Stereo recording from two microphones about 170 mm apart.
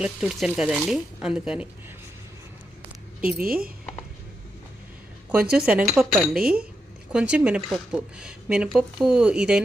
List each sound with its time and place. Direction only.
0.0 s speech: 5° right (ahead or behind)
3.4 s speech: 60° right (ahead or behind)
5.3 s speech: 5° right (ahead or behind)